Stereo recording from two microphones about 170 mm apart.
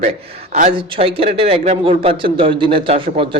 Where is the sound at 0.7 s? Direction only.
35° right (ahead or behind).